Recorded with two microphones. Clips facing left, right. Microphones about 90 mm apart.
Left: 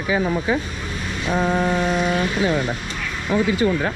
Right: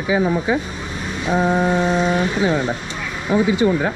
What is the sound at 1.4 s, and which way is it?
Speech, 25° right (ahead or behind).